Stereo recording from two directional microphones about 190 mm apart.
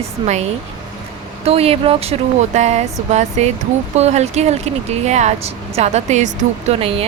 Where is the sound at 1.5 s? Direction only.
30° right (ahead or behind).